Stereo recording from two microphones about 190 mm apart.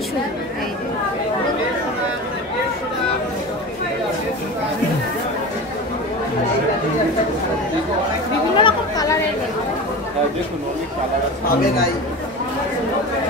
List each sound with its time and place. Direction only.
8.5 s chatter: 25° left (ahead or behind)